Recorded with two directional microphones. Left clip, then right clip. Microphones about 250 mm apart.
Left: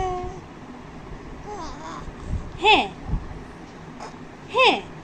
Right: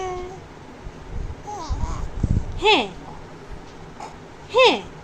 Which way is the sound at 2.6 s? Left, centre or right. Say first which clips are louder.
Left 1 dB; right.